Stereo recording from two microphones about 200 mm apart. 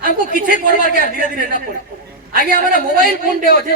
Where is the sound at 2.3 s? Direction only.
45° right (ahead or behind).